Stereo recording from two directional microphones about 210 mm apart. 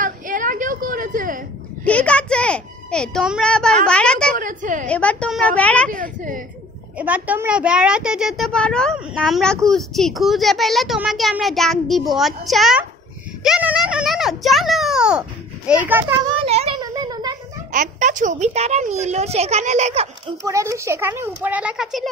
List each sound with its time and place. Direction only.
0.0 s a sound: 40° right (ahead or behind)
1.9 s a child's voice: 5° left (ahead or behind)
4.4 s a sound: 40° right (ahead or behind)
4.8 s a child's voice: 5° left (ahead or behind)
5.9 s a woman's voice: 40° right (ahead or behind)
7.0 s a child's voice: 5° right (ahead or behind)
16.3 s a sound: 30° right (ahead or behind)
17.7 s a woman's voice: 35° right (ahead or behind)
20.4 s a child's voice: 15° right (ahead or behind)